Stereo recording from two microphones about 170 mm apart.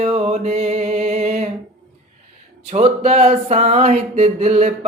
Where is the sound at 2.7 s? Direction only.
40° right (ahead or behind).